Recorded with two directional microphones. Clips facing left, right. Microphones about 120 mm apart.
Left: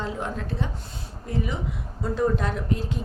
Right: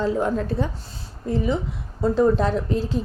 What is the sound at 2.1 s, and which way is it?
Speech, 30° right (ahead or behind).